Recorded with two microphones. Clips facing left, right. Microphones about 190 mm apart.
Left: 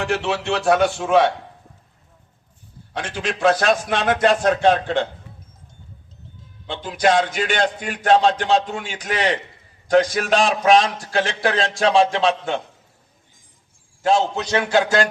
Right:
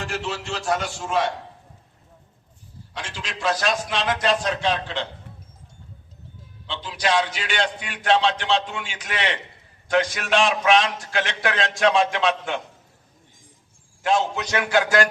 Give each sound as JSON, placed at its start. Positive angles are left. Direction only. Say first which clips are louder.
{"t": 0.0, "sound": "a man's voice", "louder": "left 7 dB", "side_deg": 65}
{"t": 2.9, "sound": "a man's voice", "louder": "left 9 dB", "side_deg": 55}
{"t": 6.7, "sound": "a man's voice", "louder": "left 6 dB", "side_deg": 50}
{"t": 14.0, "sound": "a man's voice", "louder": "left 3 dB", "side_deg": 30}